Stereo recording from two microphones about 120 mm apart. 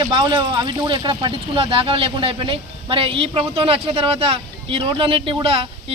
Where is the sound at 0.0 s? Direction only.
45° right (ahead or behind).